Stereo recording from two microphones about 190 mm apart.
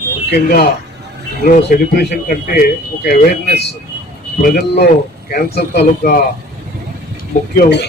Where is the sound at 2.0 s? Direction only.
55° left (ahead or behind).